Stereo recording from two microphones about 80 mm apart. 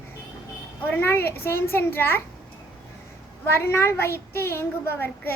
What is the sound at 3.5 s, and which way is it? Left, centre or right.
A woman's voice, left.